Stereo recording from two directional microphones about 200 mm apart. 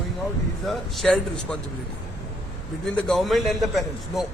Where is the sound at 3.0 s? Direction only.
Centre (ahead or behind).